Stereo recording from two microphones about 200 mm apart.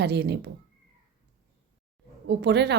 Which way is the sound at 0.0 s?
55° right (ahead or behind).